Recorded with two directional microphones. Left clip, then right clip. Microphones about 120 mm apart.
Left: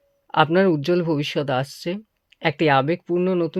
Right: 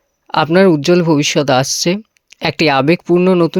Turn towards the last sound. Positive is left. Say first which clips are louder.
# right 10 dB
turn(degrees=-65)  # may be behind; listen again after turning